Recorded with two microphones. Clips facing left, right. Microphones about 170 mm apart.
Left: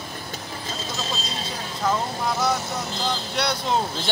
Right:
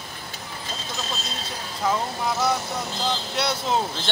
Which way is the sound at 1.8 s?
5° right (ahead or behind).